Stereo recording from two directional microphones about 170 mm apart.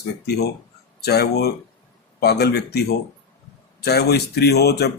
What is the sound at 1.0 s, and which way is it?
Speech, 70° left (ahead or behind).